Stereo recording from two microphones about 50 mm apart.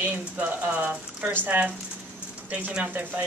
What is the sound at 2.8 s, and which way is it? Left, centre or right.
Speech, right.